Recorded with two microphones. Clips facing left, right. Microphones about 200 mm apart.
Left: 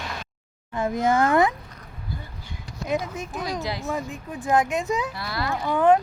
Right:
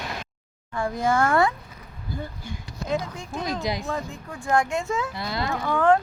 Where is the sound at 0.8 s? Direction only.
20° left (ahead or behind).